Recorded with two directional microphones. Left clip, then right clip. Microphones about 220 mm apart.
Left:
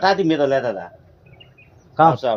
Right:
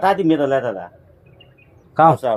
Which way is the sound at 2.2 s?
20° right (ahead or behind).